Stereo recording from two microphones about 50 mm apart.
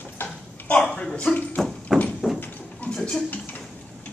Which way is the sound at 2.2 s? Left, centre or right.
Centre.